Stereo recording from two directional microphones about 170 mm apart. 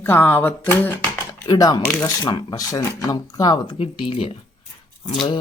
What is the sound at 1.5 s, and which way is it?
Speech, 20° left (ahead or behind).